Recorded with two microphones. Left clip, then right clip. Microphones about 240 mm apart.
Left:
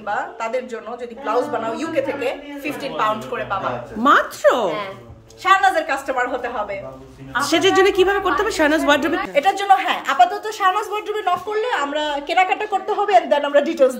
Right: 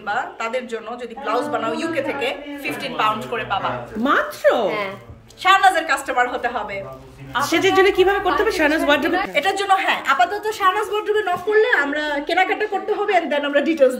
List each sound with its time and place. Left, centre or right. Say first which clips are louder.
0.1 s a woman's voice: even; left
4.0 s a woman's voice: left 3 dB; centre
5.4 s a woman's voice: right 1 dB; centre
11.7 s speech: right 2 dB; left
12.4 s a woman's voice: left 1 dB; centre